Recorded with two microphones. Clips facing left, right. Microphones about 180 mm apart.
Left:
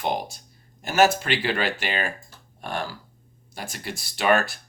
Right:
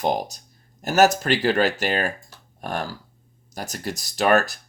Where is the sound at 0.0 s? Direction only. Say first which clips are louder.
Right 4 dB; 40° right (ahead or behind).